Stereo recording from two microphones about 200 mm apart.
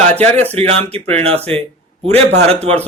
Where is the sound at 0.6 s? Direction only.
30° right (ahead or behind).